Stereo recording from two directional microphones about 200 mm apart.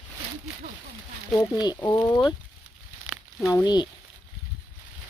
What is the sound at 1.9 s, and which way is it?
Speech, 20° left (ahead or behind).